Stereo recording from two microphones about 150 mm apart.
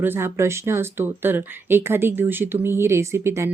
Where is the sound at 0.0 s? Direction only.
15° right (ahead or behind).